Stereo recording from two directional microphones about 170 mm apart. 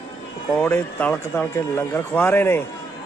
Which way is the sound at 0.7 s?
10° left (ahead or behind).